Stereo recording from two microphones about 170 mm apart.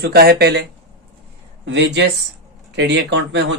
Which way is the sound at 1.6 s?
90° right.